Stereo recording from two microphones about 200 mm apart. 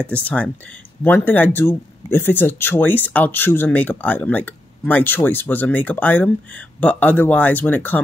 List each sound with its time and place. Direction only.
0.1 s speech: 5° left (ahead or behind)